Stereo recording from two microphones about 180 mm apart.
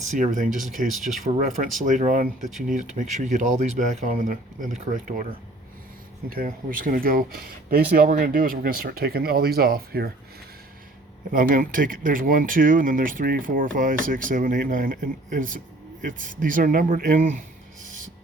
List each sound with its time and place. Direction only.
0.0 s speech: 45° right (ahead or behind)
6.3 s speech: 50° right (ahead or behind)
11.3 s speech: 50° right (ahead or behind)